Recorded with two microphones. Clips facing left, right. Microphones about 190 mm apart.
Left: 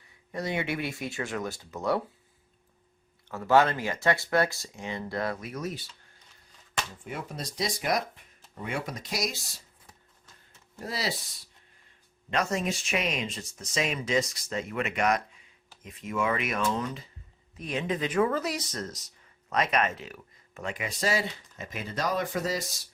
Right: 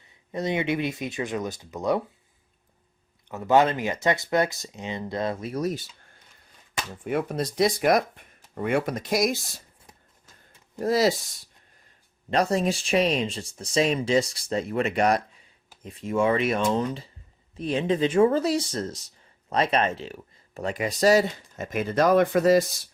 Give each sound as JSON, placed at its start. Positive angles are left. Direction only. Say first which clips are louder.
{"t": 0.3, "sound": "speech", "louder": "right 5 dB", "side_deg": -20}
{"t": 3.2, "sound": "speech", "louder": "right 2 dB", "side_deg": -20}
{"t": 7.0, "sound": "speech", "louder": "right 11 dB", "side_deg": -60}
{"t": 10.8, "sound": "speech", "louder": "right 12 dB", "side_deg": -45}
{"t": 12.3, "sound": "speech", "louder": "right 6 dB", "side_deg": -35}